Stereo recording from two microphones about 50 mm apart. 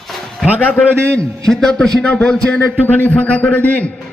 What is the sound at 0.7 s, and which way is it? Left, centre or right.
Speech, left.